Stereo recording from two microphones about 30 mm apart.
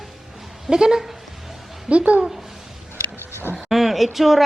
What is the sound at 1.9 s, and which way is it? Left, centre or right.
Speech, right.